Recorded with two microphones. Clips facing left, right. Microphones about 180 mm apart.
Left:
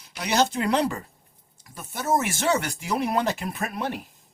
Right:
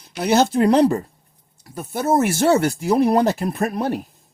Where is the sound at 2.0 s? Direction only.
60° right (ahead or behind).